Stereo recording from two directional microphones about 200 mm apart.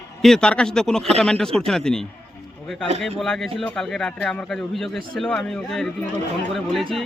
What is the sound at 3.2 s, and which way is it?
A man's voice, centre (ahead or behind).